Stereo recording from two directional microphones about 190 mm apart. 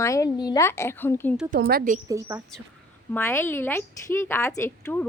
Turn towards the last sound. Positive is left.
turn(degrees=10)  # may be behind; listen again after turning